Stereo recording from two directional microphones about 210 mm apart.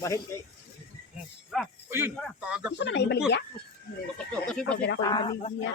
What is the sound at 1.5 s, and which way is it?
Speech, centre (ahead or behind).